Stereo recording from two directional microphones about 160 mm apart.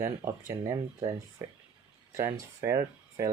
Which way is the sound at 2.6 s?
20° right (ahead or behind).